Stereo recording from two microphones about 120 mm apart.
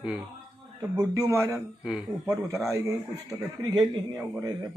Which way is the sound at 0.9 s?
25° right (ahead or behind).